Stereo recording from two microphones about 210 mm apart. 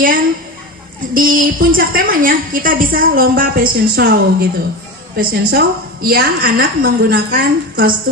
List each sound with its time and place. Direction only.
1.1 s a woman's voice: 40° right (ahead or behind)